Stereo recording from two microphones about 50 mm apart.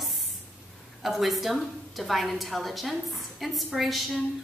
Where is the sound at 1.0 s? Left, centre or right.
Centre.